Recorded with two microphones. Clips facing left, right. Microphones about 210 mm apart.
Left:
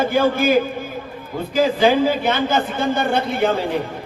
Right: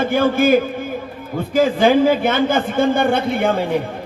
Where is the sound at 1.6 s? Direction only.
50° right (ahead or behind).